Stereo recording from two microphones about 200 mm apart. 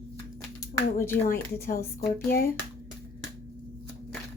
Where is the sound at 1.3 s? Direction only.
45° left (ahead or behind).